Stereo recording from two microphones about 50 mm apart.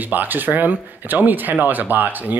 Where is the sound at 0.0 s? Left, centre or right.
Right.